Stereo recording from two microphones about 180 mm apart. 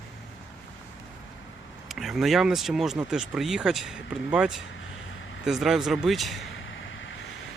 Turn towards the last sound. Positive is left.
turn(degrees=0)  # may be behind; listen again after turning